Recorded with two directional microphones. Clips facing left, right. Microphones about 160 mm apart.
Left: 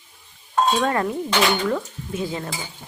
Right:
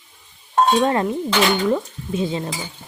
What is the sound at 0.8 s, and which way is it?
Speech, 25° right (ahead or behind).